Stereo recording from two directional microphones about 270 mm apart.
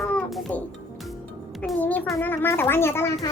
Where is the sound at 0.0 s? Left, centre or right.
Centre.